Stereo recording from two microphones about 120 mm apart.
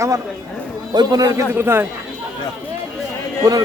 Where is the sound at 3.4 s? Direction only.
30° right (ahead or behind).